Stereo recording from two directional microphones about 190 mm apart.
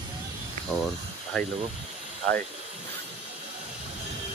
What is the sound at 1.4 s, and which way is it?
Speech, 5° left (ahead or behind).